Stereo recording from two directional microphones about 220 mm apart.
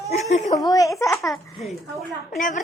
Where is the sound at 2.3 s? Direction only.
35° left (ahead or behind).